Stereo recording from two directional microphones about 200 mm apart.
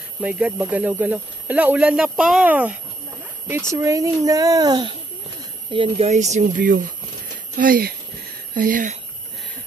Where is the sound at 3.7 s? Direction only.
15° right (ahead or behind); by 8.9 s 45° right (ahead or behind).